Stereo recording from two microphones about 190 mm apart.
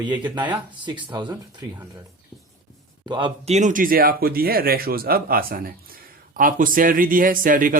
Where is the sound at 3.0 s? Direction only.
25° right (ahead or behind).